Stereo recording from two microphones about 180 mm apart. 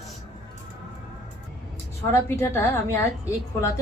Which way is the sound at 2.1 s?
15° left (ahead or behind).